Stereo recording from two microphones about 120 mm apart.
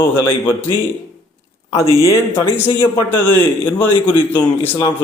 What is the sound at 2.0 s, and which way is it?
A man's voice, 20° left (ahead or behind).